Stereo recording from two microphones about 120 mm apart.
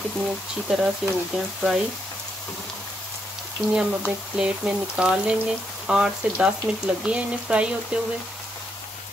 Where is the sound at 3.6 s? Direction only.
5° right (ahead or behind).